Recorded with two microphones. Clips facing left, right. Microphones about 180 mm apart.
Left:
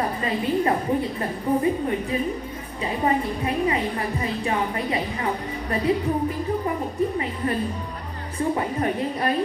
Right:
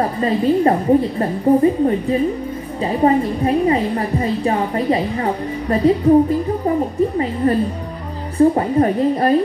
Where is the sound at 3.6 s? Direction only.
35° right (ahead or behind).